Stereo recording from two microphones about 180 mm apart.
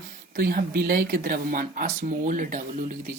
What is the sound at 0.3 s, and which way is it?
Speech, 55° right (ahead or behind).